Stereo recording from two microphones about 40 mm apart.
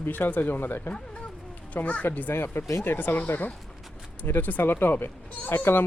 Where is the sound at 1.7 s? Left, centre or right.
Left.